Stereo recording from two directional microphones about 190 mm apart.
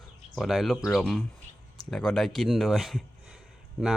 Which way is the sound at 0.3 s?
Centre (ahead or behind).